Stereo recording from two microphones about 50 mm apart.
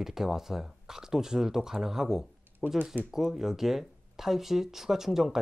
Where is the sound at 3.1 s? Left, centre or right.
Centre.